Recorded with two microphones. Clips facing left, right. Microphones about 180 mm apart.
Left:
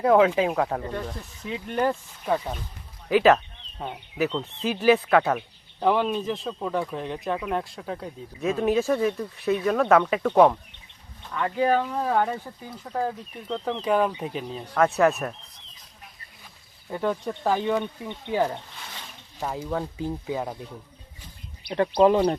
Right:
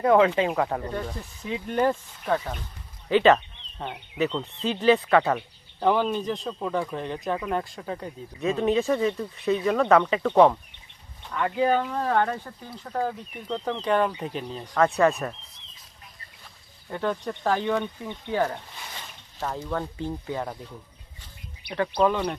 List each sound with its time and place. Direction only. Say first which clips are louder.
0.0 s speech: left 1 dB; centre (ahead or behind)
16.9 s speech: left 1 dB; 10° left (ahead or behind)
18.3 s speech: left 1 dB; 15° left (ahead or behind)
21.7 s speech: left 4 dB; 30° left (ahead or behind)